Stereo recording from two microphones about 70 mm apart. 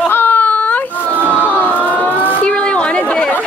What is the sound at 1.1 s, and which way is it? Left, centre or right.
Battle cry, right.